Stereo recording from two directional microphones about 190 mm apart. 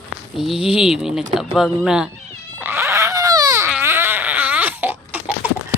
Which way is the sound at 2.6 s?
15° right (ahead or behind).